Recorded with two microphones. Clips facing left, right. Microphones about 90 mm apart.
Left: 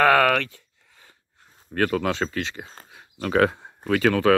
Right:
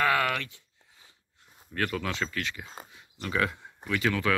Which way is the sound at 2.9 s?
55° left (ahead or behind).